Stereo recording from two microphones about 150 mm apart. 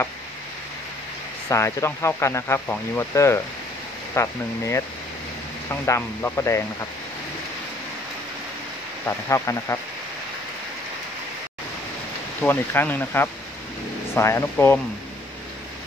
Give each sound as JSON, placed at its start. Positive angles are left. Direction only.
{"t": 1.5, "sound": "speech", "side_deg": 20}
{"t": 9.0, "sound": "speech", "side_deg": 20}
{"t": 12.4, "sound": "speech", "side_deg": 10}